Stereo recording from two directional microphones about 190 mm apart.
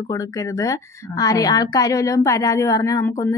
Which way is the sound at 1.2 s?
20° left (ahead or behind).